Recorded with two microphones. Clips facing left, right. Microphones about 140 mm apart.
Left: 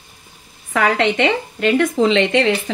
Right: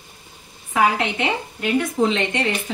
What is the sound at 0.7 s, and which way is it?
A woman's voice, 75° left (ahead or behind).